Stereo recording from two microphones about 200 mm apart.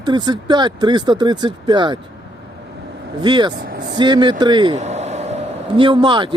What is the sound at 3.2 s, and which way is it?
Speech, 20° right (ahead or behind).